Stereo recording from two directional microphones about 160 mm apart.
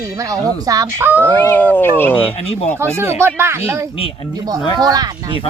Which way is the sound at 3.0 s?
15° right (ahead or behind).